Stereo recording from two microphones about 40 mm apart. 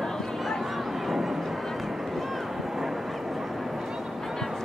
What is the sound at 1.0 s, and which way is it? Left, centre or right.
Vehicle, centre.